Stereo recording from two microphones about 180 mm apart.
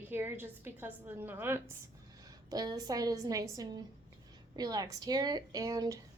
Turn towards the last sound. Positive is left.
turn(degrees=-15)  # may be behind; listen again after turning